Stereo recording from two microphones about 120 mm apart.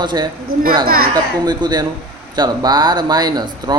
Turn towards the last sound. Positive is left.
turn(degrees=-35)  # may be behind; listen again after turning